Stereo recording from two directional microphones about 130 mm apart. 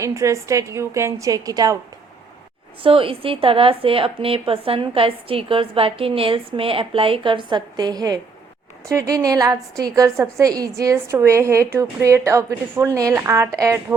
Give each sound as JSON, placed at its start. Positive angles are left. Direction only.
{"t": 0.0, "sound": "a woman's voice", "side_deg": -25}
{"t": 2.8, "sound": "a woman's voice", "side_deg": -45}